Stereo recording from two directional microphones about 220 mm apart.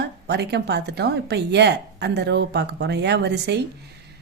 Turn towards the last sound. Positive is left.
turn(degrees=-50)  # may be behind; listen again after turning